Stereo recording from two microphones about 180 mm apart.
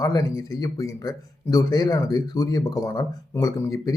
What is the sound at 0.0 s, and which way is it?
Speech, 20° left (ahead or behind).